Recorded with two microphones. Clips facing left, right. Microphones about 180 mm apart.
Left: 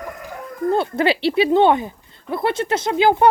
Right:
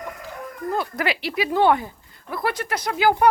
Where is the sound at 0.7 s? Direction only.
30° left (ahead or behind).